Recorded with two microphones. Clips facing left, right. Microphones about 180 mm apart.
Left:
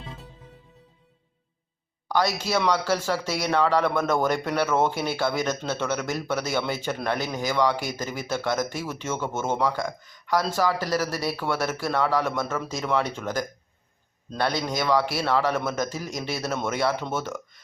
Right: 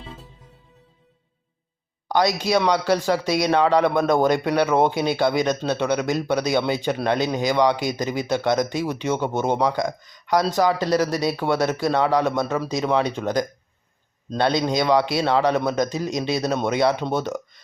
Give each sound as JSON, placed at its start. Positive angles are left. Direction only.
{"t": 2.0, "sound": "a man's voice", "side_deg": -20}